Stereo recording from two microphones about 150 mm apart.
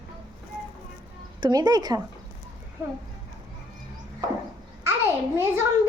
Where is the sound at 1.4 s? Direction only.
30° right (ahead or behind).